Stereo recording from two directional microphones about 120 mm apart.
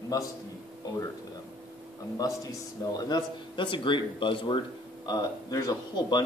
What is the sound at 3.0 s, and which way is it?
Speech, 35° left (ahead or behind).